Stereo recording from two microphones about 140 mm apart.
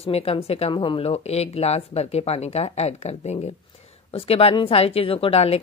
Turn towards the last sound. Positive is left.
turn(degrees=45)  # may be behind; listen again after turning